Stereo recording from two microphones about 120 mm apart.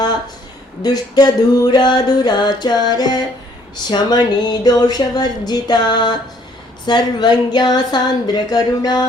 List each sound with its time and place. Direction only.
0.8 s music: 35° left (ahead or behind)